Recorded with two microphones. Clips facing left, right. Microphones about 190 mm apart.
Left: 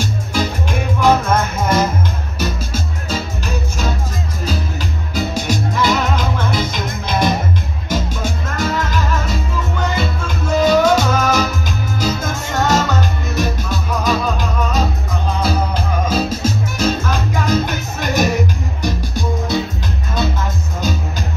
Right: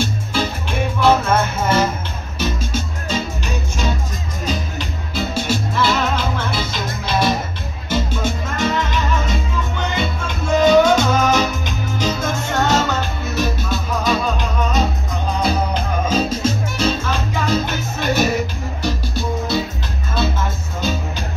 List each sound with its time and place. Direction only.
0.0 s music: 10° left (ahead or behind)
16.1 s music: 10° left (ahead or behind)